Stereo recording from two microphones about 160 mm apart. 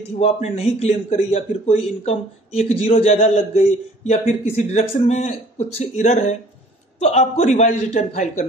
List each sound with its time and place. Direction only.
0.2 s speech: 40° left (ahead or behind)